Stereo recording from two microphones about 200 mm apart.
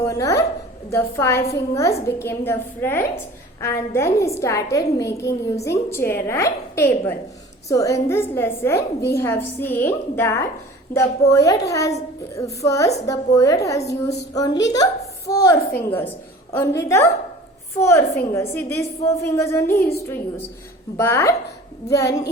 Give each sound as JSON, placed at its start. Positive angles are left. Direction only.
{"t": 0.0, "sound": "a woman's voice", "side_deg": 15}